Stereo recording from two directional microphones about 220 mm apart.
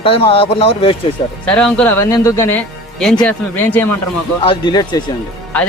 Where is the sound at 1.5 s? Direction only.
5° left (ahead or behind).